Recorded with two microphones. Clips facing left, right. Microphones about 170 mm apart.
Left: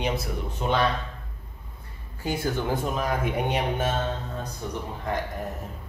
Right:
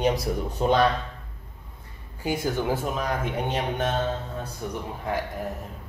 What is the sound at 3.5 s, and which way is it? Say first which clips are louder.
Speech: left 1 dB; 10° left (ahead or behind).